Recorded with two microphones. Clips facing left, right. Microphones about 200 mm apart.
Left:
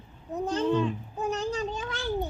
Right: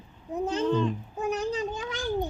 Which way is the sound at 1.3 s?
15° right (ahead or behind).